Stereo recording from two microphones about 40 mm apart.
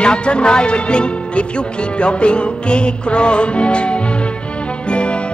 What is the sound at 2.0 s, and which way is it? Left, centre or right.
Speech, left.